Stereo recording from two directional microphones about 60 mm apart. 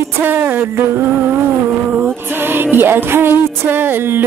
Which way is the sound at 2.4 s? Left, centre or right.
Right.